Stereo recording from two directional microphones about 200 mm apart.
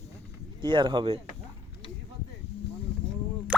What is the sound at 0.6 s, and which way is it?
Speech, 25° right (ahead or behind).